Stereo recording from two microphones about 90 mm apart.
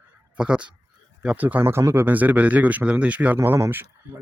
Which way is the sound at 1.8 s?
30° right (ahead or behind).